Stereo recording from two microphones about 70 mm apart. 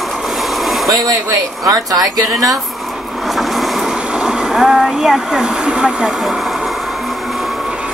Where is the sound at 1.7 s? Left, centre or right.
Right.